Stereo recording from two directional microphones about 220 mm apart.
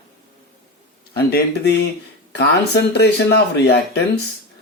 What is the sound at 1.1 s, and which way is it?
Speech, 45° left (ahead or behind).